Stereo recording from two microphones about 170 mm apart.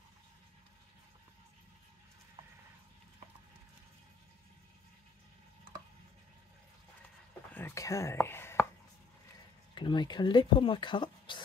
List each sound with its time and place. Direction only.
7.5 s speech: 15° left (ahead or behind)
9.8 s speech: 25° left (ahead or behind)